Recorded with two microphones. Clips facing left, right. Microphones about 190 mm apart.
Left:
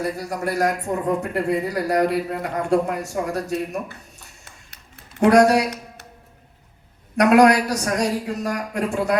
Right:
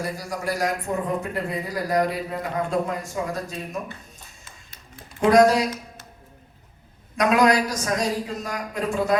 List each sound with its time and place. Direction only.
0.2 s a woman's voice: 60° left (ahead or behind)
5.2 s speech: 65° left (ahead or behind)
7.2 s a woman's voice: 65° left (ahead or behind)